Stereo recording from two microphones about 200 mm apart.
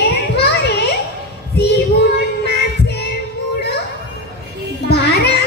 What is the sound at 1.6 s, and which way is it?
Child singing, 55° left (ahead or behind).